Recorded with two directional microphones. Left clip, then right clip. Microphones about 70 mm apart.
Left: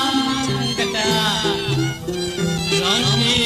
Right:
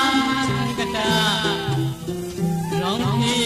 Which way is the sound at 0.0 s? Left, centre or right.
Right.